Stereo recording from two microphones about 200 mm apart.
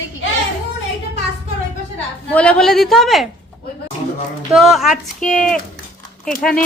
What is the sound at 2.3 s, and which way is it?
Speech, 5° left (ahead or behind).